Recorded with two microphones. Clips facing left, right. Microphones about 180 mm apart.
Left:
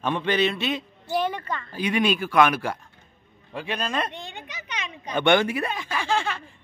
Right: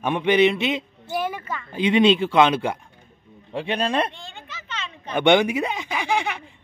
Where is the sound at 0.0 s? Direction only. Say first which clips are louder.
Right 5 dB; 15° right (ahead or behind).